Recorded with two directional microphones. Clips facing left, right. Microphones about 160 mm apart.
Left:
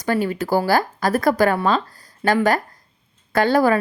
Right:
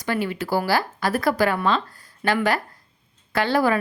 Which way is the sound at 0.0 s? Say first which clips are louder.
Left 4 dB; 40° left (ahead or behind).